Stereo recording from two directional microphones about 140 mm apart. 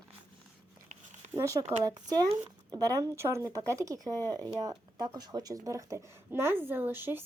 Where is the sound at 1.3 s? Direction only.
20° right (ahead or behind).